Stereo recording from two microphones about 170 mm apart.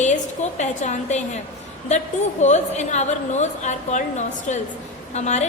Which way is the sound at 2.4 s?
45° left (ahead or behind).